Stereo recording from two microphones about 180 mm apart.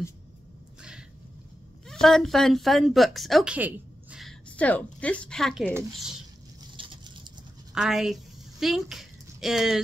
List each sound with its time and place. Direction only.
1.9 s speech: centre (ahead or behind)
6.8 s patter: 30° right (ahead or behind)
7.7 s a sound: centre (ahead or behind)